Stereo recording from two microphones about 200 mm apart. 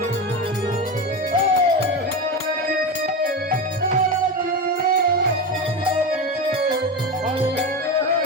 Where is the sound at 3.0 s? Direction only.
50° right (ahead or behind).